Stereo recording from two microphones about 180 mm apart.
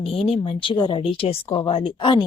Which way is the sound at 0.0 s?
30° left (ahead or behind).